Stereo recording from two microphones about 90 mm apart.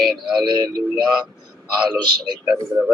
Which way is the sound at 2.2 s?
55° right (ahead or behind).